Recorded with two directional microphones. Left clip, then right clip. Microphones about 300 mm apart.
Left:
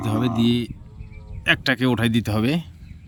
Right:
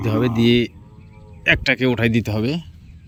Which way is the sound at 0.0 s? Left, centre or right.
Centre.